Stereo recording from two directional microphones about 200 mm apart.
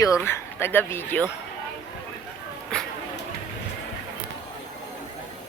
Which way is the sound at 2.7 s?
5° left (ahead or behind).